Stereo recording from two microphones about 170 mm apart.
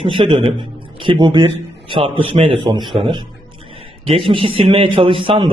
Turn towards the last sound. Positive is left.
turn(degrees=-30)  # may be behind; listen again after turning